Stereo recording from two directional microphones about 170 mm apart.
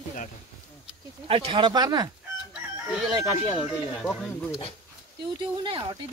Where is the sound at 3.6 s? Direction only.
Centre (ahead or behind).